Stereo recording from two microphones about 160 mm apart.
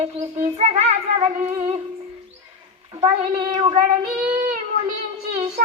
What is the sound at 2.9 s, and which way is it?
Speech, 20° right (ahead or behind).